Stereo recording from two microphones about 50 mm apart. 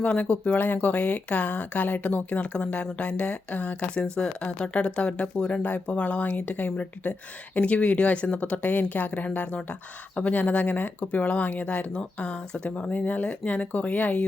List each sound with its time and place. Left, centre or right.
0.0 s speech: left